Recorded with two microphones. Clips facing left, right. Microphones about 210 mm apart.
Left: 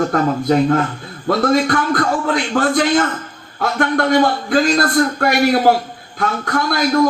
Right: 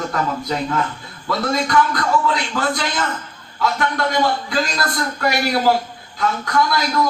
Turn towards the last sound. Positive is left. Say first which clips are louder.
# even
turn(degrees=50)  # may be behind; listen again after turning